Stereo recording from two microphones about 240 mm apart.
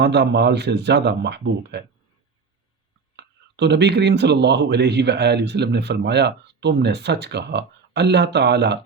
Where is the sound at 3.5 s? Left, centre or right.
Right.